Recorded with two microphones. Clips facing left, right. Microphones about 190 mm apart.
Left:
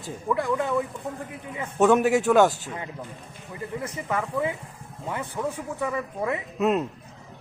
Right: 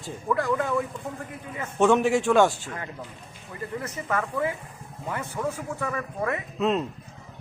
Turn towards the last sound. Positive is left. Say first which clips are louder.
# left 2 dB
turn(degrees=5)  # may be behind; listen again after turning